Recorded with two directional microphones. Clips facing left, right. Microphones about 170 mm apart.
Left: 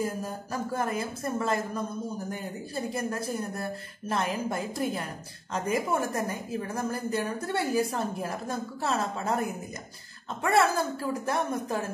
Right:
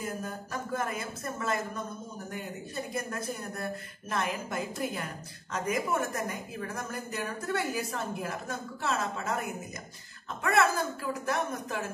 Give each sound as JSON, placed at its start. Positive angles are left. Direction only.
{"t": 0.0, "sound": "a woman's voice", "side_deg": 30}